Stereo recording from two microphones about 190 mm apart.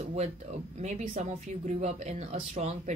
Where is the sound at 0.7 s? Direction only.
40° right (ahead or behind).